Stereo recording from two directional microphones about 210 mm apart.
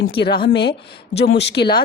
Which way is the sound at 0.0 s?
50° left (ahead or behind).